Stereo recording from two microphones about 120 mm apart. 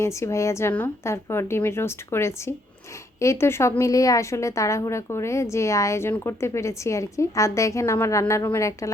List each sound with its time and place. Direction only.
0.0 s a woman's voice: 25° left (ahead or behind)